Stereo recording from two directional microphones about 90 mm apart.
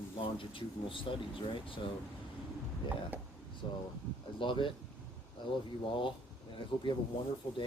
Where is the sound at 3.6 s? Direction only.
65° left (ahead or behind).